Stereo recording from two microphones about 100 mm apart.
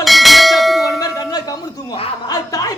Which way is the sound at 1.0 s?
40° left (ahead or behind).